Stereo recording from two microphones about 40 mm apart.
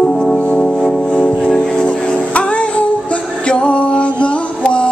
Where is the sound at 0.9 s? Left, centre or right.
Left.